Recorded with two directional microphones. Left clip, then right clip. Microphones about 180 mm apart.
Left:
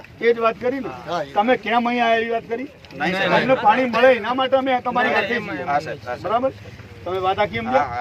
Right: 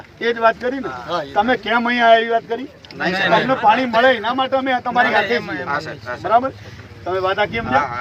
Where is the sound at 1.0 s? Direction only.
25° left (ahead or behind).